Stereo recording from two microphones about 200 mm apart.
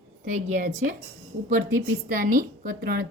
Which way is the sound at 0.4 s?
35° right (ahead or behind).